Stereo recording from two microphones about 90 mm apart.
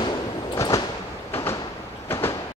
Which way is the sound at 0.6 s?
40° left (ahead or behind).